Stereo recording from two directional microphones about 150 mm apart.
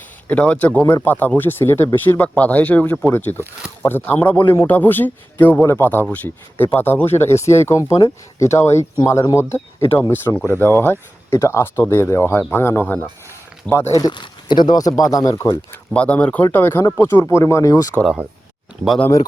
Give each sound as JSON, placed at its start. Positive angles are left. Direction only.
{"t": 0.3, "sound": "a man's voice", "side_deg": 10}
{"t": 13.9, "sound": "speech", "side_deg": 30}
{"t": 16.0, "sound": "a man's voice", "side_deg": 10}